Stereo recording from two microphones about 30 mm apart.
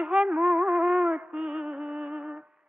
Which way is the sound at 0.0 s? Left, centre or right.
Right.